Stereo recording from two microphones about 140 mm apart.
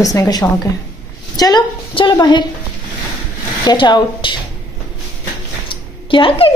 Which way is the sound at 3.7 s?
30° left (ahead or behind).